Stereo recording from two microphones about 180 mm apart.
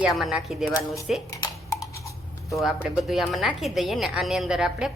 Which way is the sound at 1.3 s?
20° left (ahead or behind).